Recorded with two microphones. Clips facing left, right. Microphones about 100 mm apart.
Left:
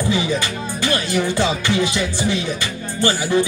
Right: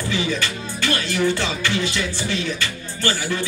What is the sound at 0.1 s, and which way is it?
Music, 15° left (ahead or behind).